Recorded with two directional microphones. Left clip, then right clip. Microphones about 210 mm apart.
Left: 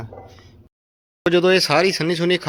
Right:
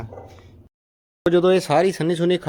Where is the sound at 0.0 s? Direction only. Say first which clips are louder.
Even; 10° left (ahead or behind).